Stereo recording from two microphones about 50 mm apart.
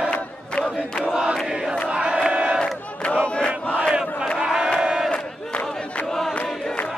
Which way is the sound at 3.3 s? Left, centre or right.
Left.